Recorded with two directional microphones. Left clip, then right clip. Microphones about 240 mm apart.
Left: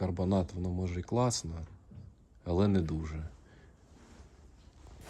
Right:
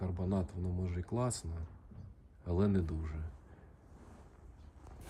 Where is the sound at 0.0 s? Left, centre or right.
Centre.